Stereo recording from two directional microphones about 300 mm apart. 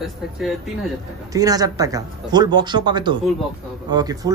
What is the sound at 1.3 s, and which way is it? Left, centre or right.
Speech, centre.